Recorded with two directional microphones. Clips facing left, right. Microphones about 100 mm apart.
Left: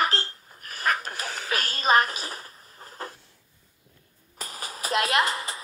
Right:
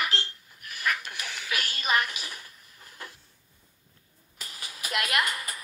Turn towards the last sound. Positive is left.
turn(degrees=30)  # may be behind; listen again after turning